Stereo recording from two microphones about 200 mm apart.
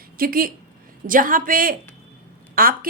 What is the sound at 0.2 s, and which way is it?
A woman's voice, 45° right (ahead or behind).